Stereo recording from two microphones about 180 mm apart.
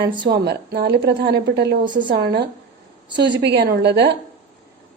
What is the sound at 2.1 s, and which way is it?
Speech, 65° right (ahead or behind).